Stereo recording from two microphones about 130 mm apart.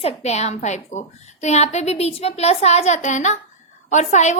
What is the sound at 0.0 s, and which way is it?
A woman's voice, 55° left (ahead or behind).